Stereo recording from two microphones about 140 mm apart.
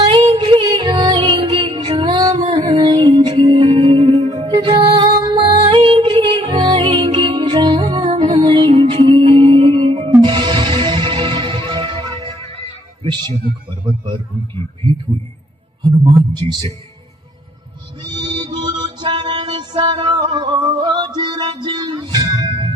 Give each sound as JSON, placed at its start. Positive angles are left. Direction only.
{"t": 0.0, "sound": "music", "side_deg": -35}
{"t": 13.0, "sound": "a sound", "side_deg": -30}
{"t": 15.1, "sound": "a man's voice", "side_deg": -35}
{"t": 18.0, "sound": "music", "side_deg": -30}